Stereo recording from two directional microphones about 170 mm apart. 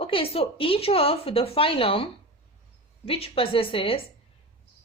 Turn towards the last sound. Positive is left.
turn(degrees=35)  # may be behind; listen again after turning